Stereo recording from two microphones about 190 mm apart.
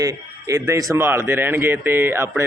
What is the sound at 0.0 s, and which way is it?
A man's voice, 15° right (ahead or behind).